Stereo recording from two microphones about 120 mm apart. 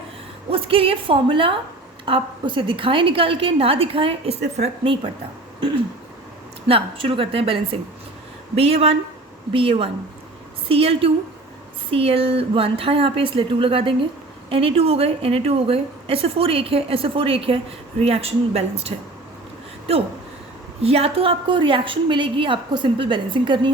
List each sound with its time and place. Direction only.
0.5 s a woman's voice: 50° right (ahead or behind)
6.7 s a woman's voice: 50° right (ahead or behind)
20.8 s a woman's voice: 55° right (ahead or behind)